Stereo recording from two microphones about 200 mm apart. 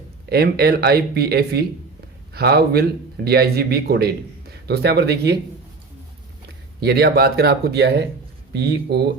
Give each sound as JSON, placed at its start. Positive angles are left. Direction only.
{"t": 0.3, "sound": "a man's voice", "side_deg": -50}
{"t": 6.7, "sound": "a man's voice", "side_deg": -55}